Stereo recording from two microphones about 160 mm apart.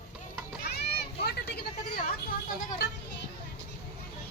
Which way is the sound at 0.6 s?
90° left.